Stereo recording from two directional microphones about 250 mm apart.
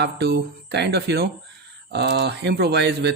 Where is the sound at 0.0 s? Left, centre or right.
Right.